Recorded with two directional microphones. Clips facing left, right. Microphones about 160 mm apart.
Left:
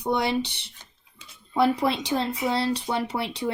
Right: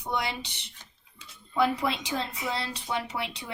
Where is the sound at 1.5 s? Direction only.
35° left (ahead or behind).